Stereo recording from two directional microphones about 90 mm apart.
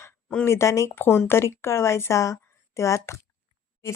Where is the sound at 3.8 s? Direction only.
30° left (ahead or behind).